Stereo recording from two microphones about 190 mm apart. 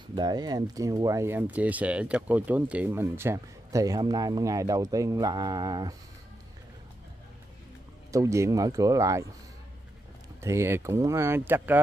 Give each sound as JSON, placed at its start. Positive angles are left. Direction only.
{"t": 0.1, "sound": "speech", "side_deg": -20}
{"t": 8.1, "sound": "speech", "side_deg": -15}
{"t": 10.4, "sound": "speech", "side_deg": -15}